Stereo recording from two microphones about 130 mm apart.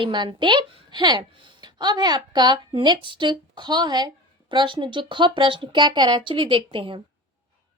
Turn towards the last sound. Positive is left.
turn(degrees=-40)  # may be behind; listen again after turning